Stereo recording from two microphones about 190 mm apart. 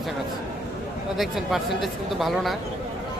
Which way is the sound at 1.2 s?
Centre (ahead or behind).